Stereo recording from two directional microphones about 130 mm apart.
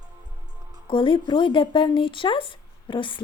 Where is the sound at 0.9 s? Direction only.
40° left (ahead or behind).